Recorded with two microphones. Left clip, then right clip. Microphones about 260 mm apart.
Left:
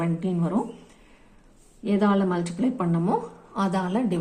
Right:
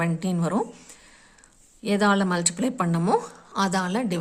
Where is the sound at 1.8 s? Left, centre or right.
Right.